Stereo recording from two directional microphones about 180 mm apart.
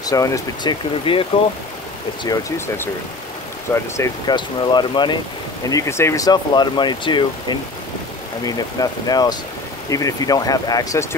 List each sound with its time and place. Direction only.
0.0 s speech: 20° left (ahead or behind)
1.1 s speech: 30° left (ahead or behind)
2.2 s speech: 15° left (ahead or behind)